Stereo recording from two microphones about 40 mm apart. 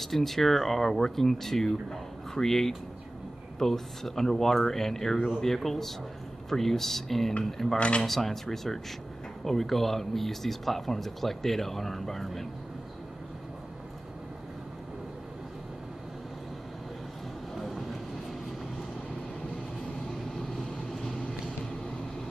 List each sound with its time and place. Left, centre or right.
0.0 s speech: centre
7.7 s speech: left
8.0 s speech: centre
17.6 s vehicle: centre
20.1 s vehicle: centre